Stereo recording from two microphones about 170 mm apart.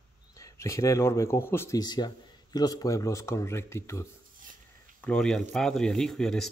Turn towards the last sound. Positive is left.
turn(degrees=5)  # may be behind; listen again after turning